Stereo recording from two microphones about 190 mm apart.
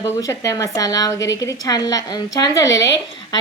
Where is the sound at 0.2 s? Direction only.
15° left (ahead or behind).